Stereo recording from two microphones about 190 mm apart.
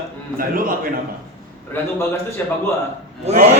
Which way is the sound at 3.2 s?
40° right (ahead or behind).